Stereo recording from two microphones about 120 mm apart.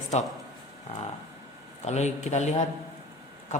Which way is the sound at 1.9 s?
70° left (ahead or behind).